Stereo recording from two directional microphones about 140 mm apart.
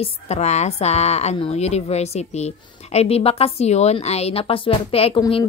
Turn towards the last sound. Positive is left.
turn(degrees=40)  # may be behind; listen again after turning